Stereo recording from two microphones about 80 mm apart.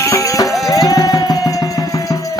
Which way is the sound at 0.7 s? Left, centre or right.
Left.